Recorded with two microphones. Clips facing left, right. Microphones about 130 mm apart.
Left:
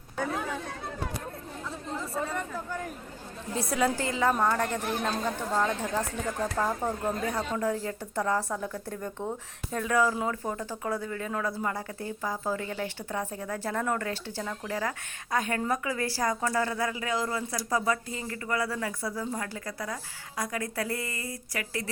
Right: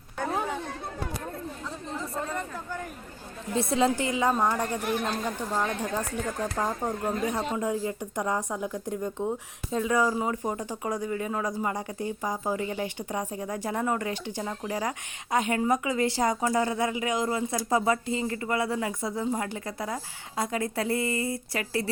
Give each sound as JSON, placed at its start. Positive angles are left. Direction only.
{"t": 2.0, "sound": "chatter", "side_deg": 5}
{"t": 3.5, "sound": "a woman's voice", "side_deg": -25}